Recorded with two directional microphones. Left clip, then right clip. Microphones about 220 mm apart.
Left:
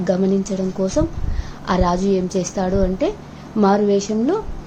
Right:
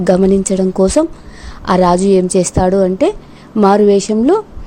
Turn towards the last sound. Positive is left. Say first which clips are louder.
# right 7 dB
turn(degrees=-45)  # may be behind; listen again after turning